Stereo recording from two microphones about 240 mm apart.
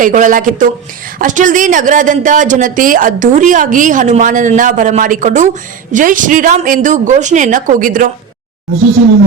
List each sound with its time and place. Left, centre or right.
0.0 s speech: right